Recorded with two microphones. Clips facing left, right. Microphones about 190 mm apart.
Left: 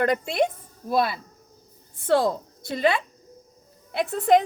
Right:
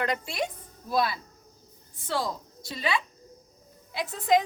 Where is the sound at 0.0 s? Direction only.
50° left (ahead or behind).